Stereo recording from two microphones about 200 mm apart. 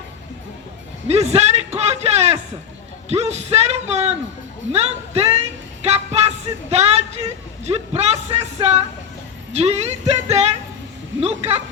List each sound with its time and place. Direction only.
1.0 s a sound: 30° right (ahead or behind)
3.1 s speech: 30° right (ahead or behind)
4.7 s music: 30° right (ahead or behind)
7.6 s speech: 30° right (ahead or behind)